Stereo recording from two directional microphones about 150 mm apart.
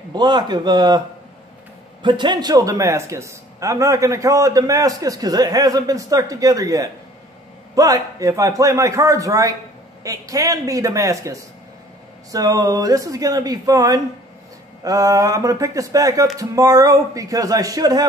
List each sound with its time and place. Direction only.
0.1 s a man's voice: 30° right (ahead or behind)
2.0 s a man's voice: 30° right (ahead or behind)